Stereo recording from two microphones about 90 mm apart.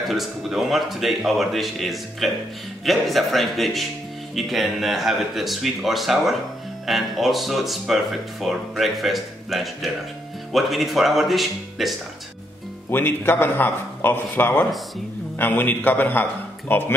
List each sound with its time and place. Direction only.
0.0 s speech: centre (ahead or behind)
12.9 s speech: 25° left (ahead or behind)